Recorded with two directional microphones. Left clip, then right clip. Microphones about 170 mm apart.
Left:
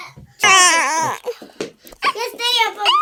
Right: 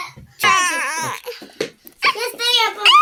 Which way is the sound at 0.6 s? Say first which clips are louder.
Left 6 dB; 90° left.